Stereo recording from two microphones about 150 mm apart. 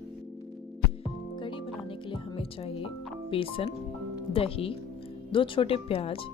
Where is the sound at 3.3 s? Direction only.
35° left (ahead or behind).